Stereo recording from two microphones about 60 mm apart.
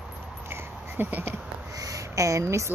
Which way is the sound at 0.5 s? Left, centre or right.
Right.